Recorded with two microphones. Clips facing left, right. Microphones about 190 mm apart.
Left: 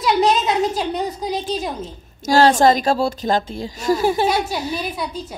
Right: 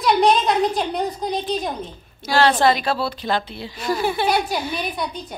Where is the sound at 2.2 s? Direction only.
45° left (ahead or behind).